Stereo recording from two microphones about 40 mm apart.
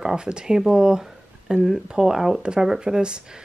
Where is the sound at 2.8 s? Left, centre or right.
Right.